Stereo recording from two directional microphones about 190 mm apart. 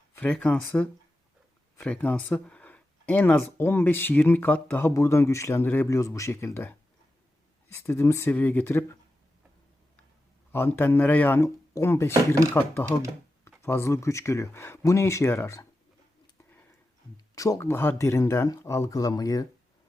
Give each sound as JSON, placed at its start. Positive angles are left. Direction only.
{"t": 0.2, "sound": "speech", "side_deg": 5}
{"t": 10.5, "sound": "speech", "side_deg": 10}
{"t": 16.2, "sound": "a sound", "side_deg": 15}
{"t": 17.3, "sound": "speech", "side_deg": 20}